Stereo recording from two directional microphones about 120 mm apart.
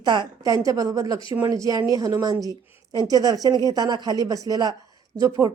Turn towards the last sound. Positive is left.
turn(degrees=-30)  # may be behind; listen again after turning